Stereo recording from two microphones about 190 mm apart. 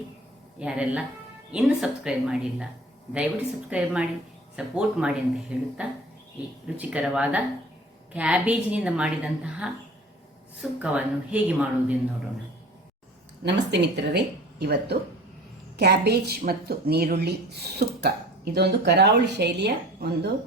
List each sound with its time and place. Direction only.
0.6 s a woman's voice: 5° right (ahead or behind)
3.7 s a woman's voice: 5° right (ahead or behind)
13.4 s speech: 65° right (ahead or behind)